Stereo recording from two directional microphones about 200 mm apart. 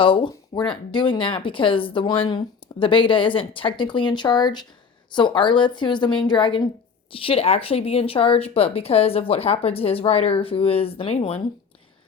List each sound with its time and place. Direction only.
0.0 s speech: 25° left (ahead or behind)